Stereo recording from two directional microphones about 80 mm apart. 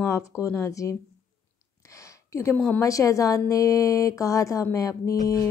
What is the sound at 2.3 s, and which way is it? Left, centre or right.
A woman's voice, left.